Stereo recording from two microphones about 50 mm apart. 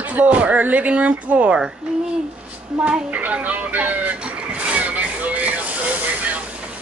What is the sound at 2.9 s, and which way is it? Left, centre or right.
Music, right.